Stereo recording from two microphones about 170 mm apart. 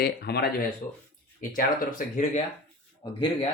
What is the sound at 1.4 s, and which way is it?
Speech, 50° left (ahead or behind).